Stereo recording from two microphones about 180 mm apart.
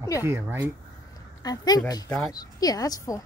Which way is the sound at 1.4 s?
20° left (ahead or behind).